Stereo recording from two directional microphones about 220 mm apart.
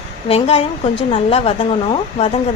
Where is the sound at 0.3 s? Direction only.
25° left (ahead or behind).